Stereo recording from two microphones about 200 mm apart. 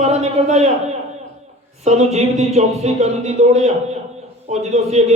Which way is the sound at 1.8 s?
35° right (ahead or behind).